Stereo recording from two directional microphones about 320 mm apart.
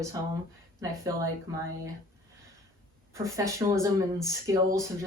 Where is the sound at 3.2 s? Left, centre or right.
Centre.